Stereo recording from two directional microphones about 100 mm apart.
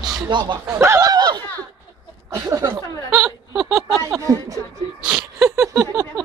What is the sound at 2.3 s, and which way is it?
Speech, 35° right (ahead or behind).